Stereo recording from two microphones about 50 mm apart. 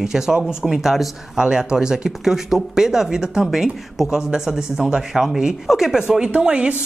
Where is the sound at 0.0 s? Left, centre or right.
Centre.